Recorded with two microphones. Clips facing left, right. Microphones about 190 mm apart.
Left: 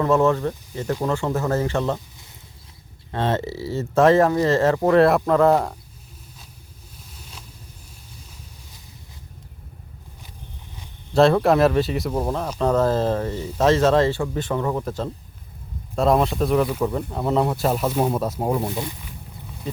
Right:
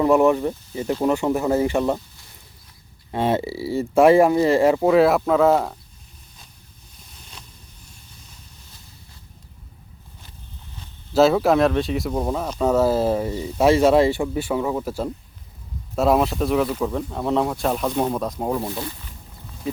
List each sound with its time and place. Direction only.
0.0 s speech: 15° right (ahead or behind)
3.1 s speech: 10° right (ahead or behind)
7.1 s vehicle: 5° left (ahead or behind)
11.1 s speech: 5° right (ahead or behind); by 18.9 s 15° left (ahead or behind)